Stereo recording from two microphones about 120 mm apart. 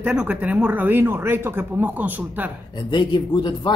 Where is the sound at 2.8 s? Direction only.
40° left (ahead or behind).